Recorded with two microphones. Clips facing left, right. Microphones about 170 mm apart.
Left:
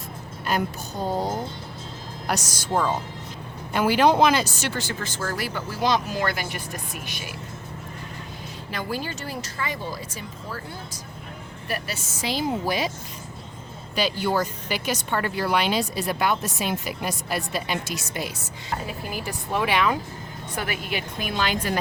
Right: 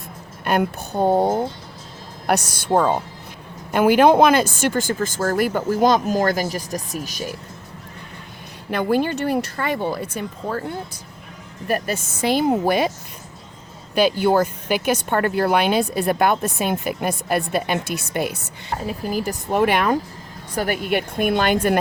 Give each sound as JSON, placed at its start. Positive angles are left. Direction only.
{"t": 0.4, "sound": "speech", "side_deg": -60}
{"t": 8.7, "sound": "speech", "side_deg": -55}
{"t": 11.7, "sound": "speech", "side_deg": -50}
{"t": 13.9, "sound": "speech", "side_deg": -55}
{"t": 18.9, "sound": "speech", "side_deg": -40}